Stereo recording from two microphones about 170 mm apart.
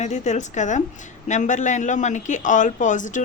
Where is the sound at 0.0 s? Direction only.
45° left (ahead or behind).